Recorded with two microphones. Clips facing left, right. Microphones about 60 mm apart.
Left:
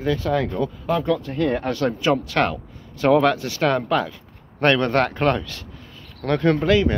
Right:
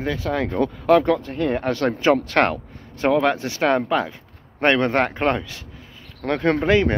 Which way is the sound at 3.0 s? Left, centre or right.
Centre.